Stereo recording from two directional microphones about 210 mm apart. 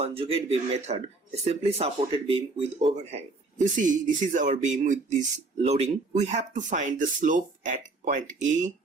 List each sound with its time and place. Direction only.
0.0 s speech: 25° right (ahead or behind)